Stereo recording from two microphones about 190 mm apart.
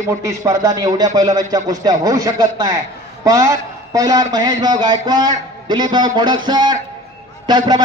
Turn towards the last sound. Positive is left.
turn(degrees=-20)  # may be behind; listen again after turning